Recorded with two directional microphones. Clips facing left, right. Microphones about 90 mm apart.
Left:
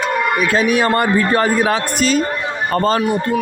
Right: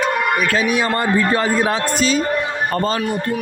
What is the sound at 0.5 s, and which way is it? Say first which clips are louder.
A man's voice: left 3 dB; 50° left (ahead or behind).